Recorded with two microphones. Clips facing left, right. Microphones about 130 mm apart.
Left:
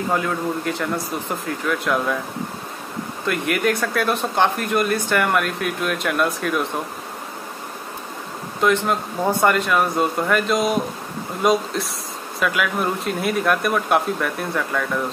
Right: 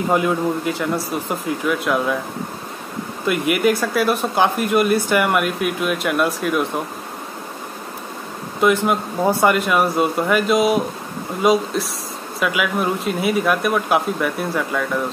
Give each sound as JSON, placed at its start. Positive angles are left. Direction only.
{"t": 0.1, "sound": "speech", "side_deg": -15}
{"t": 0.7, "sound": "speech", "side_deg": -5}
{"t": 3.3, "sound": "speech", "side_deg": -10}
{"t": 8.5, "sound": "speech", "side_deg": -10}